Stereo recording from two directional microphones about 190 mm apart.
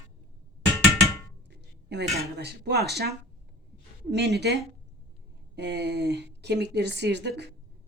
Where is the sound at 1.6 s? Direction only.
65° right (ahead or behind).